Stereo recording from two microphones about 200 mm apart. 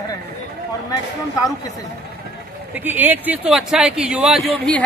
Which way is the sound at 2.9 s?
10° right (ahead or behind).